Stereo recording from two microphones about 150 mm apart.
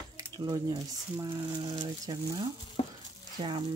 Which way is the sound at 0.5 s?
25° right (ahead or behind).